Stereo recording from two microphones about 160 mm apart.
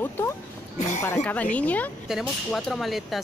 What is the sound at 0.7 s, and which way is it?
Speech, 50° left (ahead or behind).